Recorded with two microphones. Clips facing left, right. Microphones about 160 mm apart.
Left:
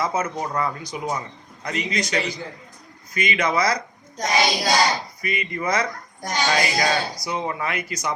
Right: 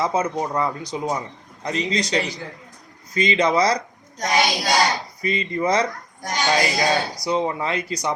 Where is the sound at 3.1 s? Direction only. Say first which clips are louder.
Right 4 dB; 30° right (ahead or behind).